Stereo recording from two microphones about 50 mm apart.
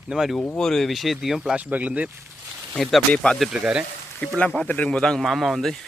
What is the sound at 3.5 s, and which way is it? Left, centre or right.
Speech, centre.